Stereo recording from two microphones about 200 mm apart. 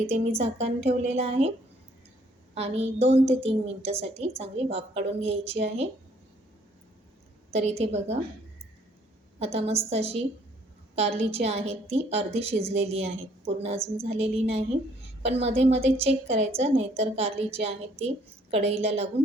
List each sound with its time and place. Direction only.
0.1 s a woman's voice: 30° right (ahead or behind)
2.6 s a woman's voice: 30° right (ahead or behind)
7.5 s a woman's voice: 30° right (ahead or behind)
9.4 s a woman's voice: 30° right (ahead or behind)
13.7 s speech: 10° right (ahead or behind)
14.0 s a woman's voice: 30° right (ahead or behind)